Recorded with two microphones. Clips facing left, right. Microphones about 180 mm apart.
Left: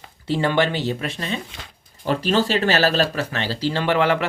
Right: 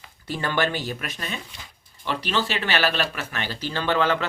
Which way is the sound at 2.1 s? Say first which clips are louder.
Left 6 dB; 40° left (ahead or behind).